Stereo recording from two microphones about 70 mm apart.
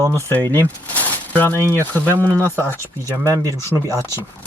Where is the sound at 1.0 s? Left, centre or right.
Left.